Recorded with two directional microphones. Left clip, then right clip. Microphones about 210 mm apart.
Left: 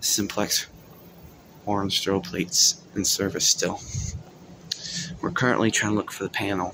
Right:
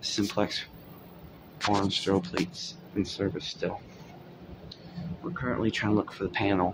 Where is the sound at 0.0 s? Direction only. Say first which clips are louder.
Left 3 dB; centre (ahead or behind).